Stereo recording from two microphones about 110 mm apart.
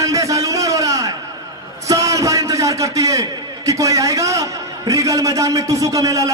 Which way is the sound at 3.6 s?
30° right (ahead or behind).